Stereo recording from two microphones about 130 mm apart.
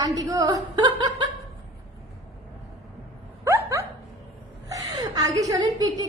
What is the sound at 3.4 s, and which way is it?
Dog, 20° right (ahead or behind).